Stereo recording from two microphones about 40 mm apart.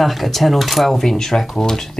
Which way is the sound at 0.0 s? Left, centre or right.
Centre.